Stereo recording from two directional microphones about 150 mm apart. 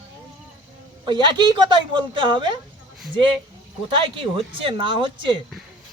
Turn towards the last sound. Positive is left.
turn(degrees=-35)  # may be behind; listen again after turning